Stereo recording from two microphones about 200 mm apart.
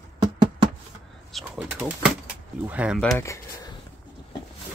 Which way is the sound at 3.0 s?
5° left (ahead or behind).